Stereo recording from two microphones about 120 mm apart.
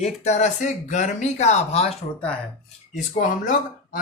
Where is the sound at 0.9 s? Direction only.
90° left; by 1.9 s 60° left (ahead or behind).